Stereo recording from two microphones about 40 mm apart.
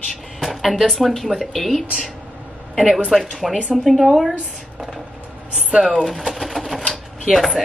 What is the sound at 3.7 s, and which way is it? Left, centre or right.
Speech, centre.